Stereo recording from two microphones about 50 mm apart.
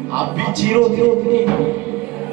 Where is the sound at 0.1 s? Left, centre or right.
Right.